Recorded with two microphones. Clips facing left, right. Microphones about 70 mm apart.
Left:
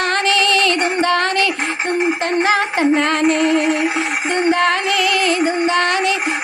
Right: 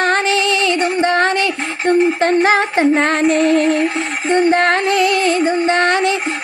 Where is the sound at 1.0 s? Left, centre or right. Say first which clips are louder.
Right 2 dB; right.